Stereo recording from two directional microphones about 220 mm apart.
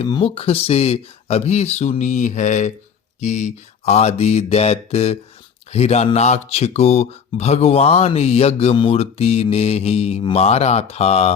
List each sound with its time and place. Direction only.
0.0 s speech: 25° left (ahead or behind)